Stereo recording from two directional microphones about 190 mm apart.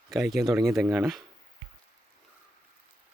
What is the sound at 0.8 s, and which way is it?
Speech, centre (ahead or behind).